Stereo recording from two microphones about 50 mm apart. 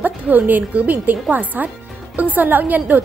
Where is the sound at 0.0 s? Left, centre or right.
Right.